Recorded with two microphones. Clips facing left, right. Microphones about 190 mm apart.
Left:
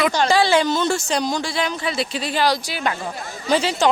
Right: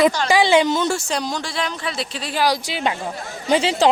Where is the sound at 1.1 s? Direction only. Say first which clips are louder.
Left 3 dB; centre (ahead or behind).